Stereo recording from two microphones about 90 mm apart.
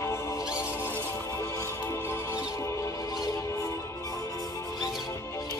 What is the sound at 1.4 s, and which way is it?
Music, 35° left (ahead or behind).